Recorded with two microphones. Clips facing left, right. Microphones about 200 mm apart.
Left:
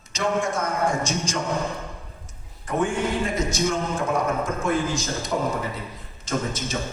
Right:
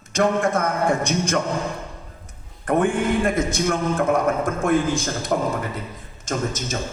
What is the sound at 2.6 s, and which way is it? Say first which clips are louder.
A man's voice: right 4 dB; 55° right (ahead or behind).